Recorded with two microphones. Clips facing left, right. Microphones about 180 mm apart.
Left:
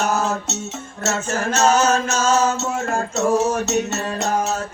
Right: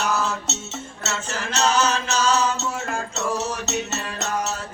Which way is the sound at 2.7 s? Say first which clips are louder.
Left 5 dB; 45° left (ahead or behind).